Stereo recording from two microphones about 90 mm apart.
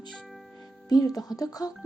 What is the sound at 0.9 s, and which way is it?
Speech, 45° left (ahead or behind).